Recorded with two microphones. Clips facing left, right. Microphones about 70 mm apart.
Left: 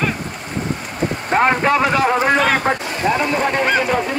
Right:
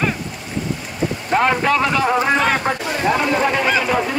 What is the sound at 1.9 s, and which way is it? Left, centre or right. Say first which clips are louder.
Speech: left 1 dB; centre.